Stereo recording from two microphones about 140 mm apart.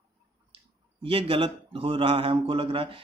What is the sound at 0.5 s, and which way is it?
Speech, 40° right (ahead or behind).